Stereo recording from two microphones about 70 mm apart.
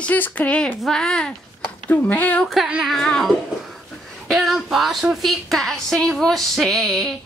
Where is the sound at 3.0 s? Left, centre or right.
Centre.